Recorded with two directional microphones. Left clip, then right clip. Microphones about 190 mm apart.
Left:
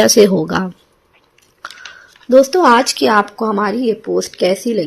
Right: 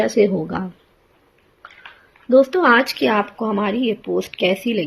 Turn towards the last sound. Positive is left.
turn(degrees=10)  # may be behind; listen again after turning